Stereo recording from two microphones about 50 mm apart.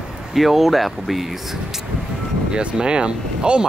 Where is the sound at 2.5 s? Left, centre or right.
Right.